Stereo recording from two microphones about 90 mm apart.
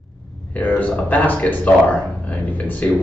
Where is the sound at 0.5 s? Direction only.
15° left (ahead or behind).